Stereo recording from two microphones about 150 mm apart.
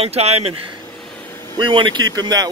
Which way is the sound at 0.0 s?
45° right (ahead or behind).